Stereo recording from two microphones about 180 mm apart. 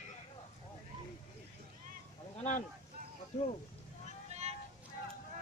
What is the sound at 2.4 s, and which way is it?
Speech, 45° left (ahead or behind).